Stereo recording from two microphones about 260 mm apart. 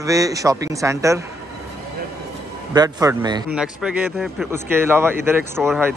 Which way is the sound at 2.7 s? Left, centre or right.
Centre.